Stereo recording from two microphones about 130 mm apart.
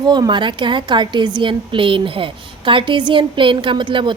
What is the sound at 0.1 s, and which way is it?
A woman's voice, 35° right (ahead or behind).